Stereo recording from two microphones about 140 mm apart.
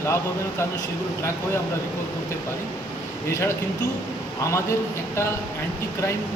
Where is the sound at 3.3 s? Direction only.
20° left (ahead or behind).